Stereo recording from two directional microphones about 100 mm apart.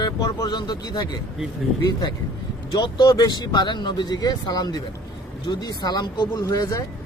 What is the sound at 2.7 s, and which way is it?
Speech, 45° left (ahead or behind).